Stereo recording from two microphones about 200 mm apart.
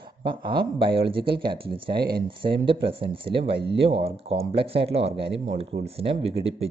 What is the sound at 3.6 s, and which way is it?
Speech, 60° right (ahead or behind).